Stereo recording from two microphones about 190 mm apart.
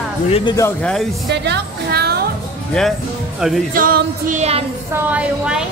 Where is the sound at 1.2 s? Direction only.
60° right (ahead or behind).